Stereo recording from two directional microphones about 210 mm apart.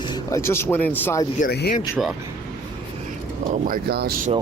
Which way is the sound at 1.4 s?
45° left (ahead or behind).